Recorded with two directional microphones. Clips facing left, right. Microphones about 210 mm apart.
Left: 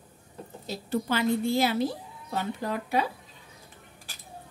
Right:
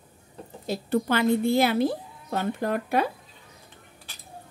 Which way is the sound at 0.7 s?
55° right (ahead or behind).